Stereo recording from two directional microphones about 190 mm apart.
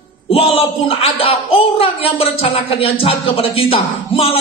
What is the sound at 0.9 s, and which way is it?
A woman's voice, 30° left (ahead or behind).